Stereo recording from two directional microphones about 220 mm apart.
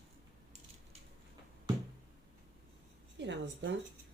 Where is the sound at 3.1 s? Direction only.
55° right (ahead or behind).